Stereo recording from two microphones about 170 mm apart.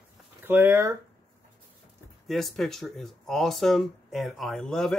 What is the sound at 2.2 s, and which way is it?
A man's voice, centre (ahead or behind).